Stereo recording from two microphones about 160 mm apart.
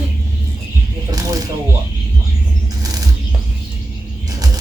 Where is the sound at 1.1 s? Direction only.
20° right (ahead or behind).